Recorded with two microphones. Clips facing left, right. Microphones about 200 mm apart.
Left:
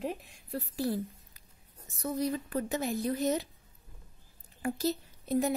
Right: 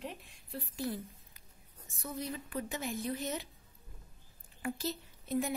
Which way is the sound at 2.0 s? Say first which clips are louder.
Left 8 dB; 40° left (ahead or behind).